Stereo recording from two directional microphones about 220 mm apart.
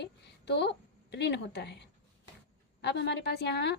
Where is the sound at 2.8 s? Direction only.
50° left (ahead or behind).